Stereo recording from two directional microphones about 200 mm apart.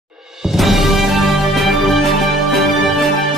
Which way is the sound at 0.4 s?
Centre (ahead or behind).